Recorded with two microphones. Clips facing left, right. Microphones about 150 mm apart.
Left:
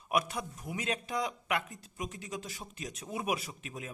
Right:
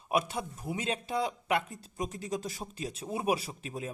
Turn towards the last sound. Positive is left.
turn(degrees=-30)  # may be behind; listen again after turning